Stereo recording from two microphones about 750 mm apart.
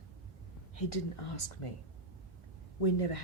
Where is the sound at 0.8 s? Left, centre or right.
Left.